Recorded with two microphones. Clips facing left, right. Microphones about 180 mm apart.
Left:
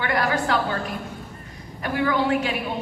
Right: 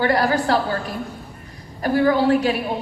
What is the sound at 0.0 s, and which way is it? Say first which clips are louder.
Speech: right 5 dB; 35° right (ahead or behind).